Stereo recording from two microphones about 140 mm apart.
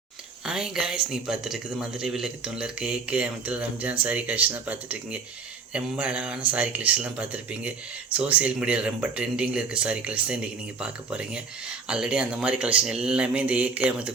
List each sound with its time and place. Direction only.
0.4 s speech: 5° right (ahead or behind)